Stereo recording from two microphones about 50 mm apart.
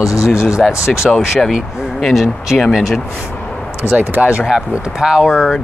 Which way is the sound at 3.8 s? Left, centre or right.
Right.